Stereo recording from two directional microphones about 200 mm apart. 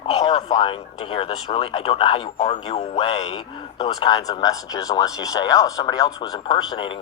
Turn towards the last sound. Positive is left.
turn(degrees=25)  # may be behind; listen again after turning